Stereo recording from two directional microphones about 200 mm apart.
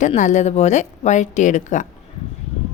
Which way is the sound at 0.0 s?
35° left (ahead or behind).